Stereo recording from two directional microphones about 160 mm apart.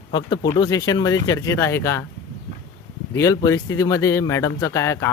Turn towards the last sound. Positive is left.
turn(degrees=15)  # may be behind; listen again after turning